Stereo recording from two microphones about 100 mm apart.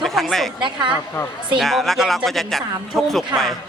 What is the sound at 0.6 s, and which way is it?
Speech, 55° right (ahead or behind).